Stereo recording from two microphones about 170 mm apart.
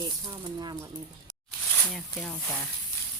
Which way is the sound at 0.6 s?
25° right (ahead or behind).